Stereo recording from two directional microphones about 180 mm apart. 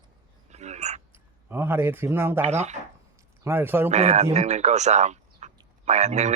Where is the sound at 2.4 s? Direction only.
40° right (ahead or behind).